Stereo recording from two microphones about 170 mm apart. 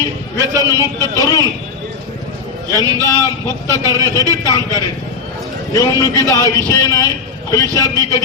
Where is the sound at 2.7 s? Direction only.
20° right (ahead or behind).